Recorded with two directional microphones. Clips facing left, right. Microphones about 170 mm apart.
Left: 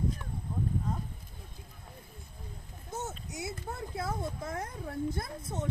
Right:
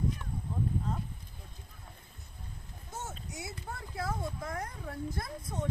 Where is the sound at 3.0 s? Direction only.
20° left (ahead or behind).